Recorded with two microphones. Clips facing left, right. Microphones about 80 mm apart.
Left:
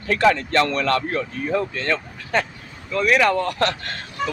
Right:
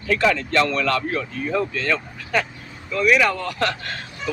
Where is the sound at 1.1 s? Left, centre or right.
Left.